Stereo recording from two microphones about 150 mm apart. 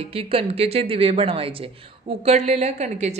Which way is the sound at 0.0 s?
40° right (ahead or behind).